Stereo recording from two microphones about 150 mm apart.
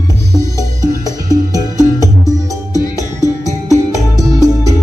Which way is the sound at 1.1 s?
25° right (ahead or behind).